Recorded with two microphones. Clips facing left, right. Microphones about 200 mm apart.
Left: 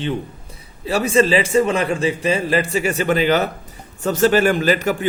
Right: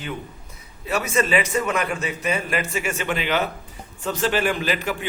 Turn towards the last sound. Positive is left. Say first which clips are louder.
# left 7 dB
turn(degrees=45)  # may be behind; listen again after turning